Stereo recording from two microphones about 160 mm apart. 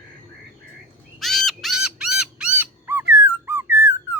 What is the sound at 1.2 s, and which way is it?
Bird, centre (ahead or behind).